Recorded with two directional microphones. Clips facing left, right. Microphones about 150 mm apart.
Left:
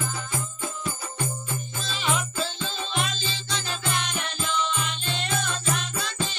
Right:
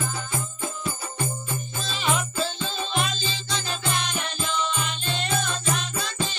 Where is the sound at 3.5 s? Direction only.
35° right (ahead or behind).